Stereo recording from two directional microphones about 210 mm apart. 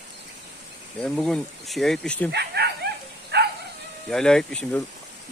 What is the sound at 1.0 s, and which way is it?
Speech, centre (ahead or behind).